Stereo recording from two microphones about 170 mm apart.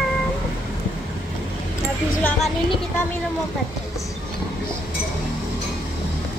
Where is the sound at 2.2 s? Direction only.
10° left (ahead or behind).